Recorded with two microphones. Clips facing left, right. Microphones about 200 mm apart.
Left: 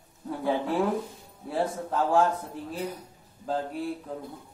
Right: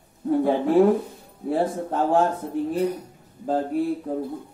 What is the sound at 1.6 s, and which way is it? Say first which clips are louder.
Speech: right 3 dB; 25° right (ahead or behind).